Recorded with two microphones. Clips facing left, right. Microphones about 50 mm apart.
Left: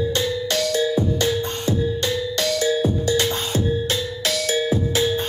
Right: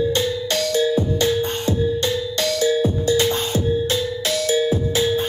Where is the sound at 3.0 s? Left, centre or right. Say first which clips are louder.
Right 3 dB; right.